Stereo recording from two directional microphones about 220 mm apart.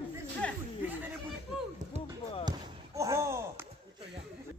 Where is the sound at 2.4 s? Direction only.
15° right (ahead or behind).